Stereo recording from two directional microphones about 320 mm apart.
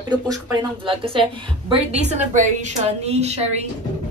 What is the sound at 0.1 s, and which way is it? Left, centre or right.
A woman's voice, centre.